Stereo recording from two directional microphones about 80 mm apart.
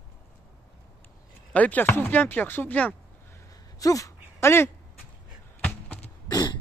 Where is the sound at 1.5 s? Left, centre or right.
Centre.